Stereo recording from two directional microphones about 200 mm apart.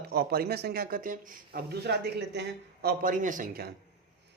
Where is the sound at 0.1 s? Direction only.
50° right (ahead or behind).